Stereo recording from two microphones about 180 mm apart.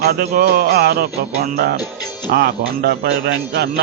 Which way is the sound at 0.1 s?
60° right (ahead or behind).